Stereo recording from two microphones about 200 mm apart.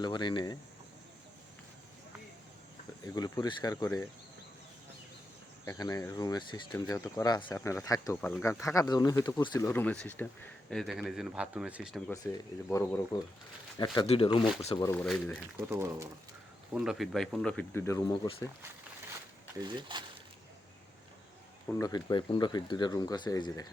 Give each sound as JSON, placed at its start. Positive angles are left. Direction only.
{"t": 0.0, "sound": "speech", "side_deg": 20}
{"t": 3.2, "sound": "speech", "side_deg": 20}
{"t": 5.6, "sound": "speech", "side_deg": 15}
{"t": 12.1, "sound": "speech", "side_deg": 15}
{"t": 13.7, "sound": "speech", "side_deg": 20}
{"t": 14.8, "sound": "speech", "side_deg": 10}
{"t": 15.0, "sound": "speech", "side_deg": 0}
{"t": 15.5, "sound": "speech", "side_deg": -15}
{"t": 16.7, "sound": "speech", "side_deg": -5}
{"t": 19.5, "sound": "speech", "side_deg": -20}
{"t": 21.7, "sound": "speech", "side_deg": 20}